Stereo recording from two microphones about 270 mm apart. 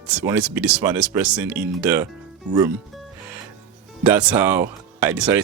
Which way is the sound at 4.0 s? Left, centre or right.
Centre.